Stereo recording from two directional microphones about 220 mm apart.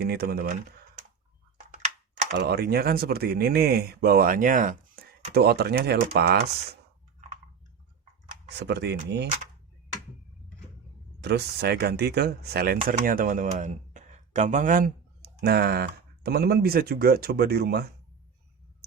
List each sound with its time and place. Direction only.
0.0 s speech: 45° right (ahead or behind)
2.3 s speech: 45° right (ahead or behind)
8.4 s speech: 50° right (ahead or behind)
11.2 s speech: 50° right (ahead or behind)